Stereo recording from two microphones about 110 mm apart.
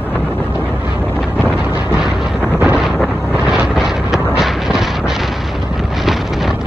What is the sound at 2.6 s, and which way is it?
Vehicle, 5° right (ahead or behind).